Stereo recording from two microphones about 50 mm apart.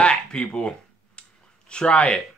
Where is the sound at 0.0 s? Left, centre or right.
Left.